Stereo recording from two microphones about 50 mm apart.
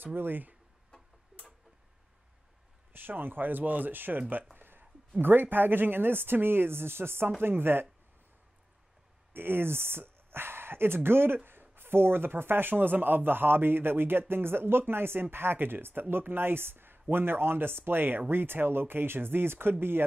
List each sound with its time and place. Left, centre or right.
0.0 s speech: right
2.9 s speech: right
4.6 s a sound: right
5.2 s speech: right
9.3 s speech: right